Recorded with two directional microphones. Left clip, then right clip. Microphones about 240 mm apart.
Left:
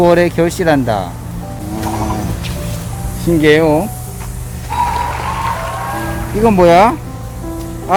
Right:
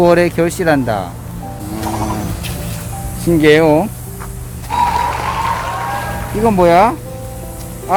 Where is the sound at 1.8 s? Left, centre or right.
Centre.